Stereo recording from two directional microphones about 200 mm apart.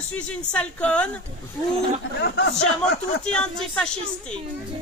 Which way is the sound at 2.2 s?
55° left (ahead or behind).